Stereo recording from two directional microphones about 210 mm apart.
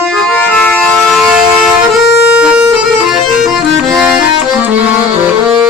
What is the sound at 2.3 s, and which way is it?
Bagpipes, 5° right (ahead or behind).